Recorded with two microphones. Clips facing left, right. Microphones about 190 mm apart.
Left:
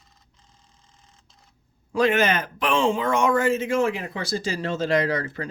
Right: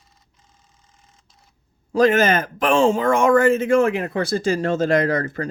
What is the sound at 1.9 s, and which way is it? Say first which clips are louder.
Speech: right 5 dB; 40° right (ahead or behind).